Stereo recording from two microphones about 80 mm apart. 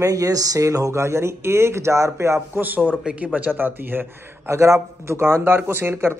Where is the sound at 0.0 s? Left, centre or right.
Right.